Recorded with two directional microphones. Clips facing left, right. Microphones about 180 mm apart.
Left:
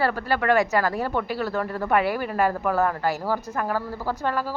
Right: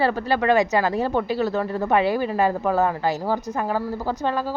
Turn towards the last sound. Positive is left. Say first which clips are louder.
# right 2 dB
turn(degrees=-20)  # may be behind; listen again after turning